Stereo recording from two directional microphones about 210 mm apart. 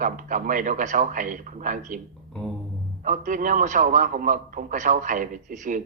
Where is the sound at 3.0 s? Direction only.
40° right (ahead or behind).